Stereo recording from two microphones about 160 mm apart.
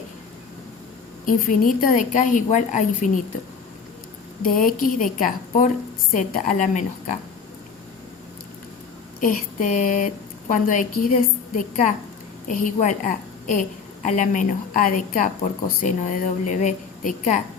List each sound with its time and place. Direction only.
1.2 s a woman's voice: 60° left (ahead or behind)
4.4 s a woman's voice: 60° left (ahead or behind)
9.2 s a sound: 55° left (ahead or behind)
10.5 s a woman's voice: 55° left (ahead or behind)